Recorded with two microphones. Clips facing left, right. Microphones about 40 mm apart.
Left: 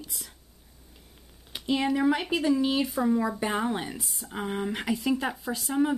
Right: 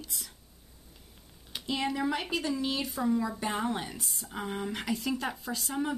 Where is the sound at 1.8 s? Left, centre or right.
Centre.